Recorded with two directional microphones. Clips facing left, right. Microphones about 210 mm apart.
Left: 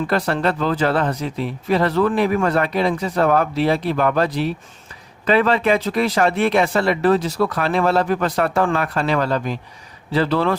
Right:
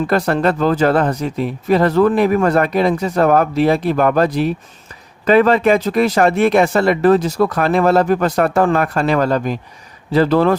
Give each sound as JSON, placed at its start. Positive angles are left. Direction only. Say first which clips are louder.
{"t": 0.1, "sound": "speech", "louder": "right 4 dB", "side_deg": -45}